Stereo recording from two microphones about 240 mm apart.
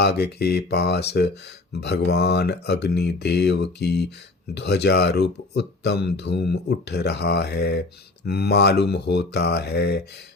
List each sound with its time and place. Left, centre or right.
0.0 s speech: left